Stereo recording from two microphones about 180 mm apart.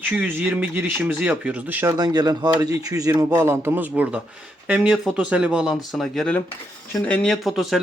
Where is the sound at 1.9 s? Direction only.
20° right (ahead or behind).